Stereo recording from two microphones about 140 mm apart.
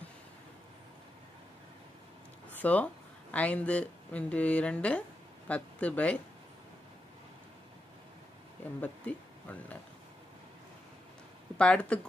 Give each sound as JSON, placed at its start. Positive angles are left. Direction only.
{"t": 2.5, "sound": "speech", "side_deg": 10}
{"t": 8.8, "sound": "speech", "side_deg": 10}
{"t": 11.5, "sound": "speech", "side_deg": 10}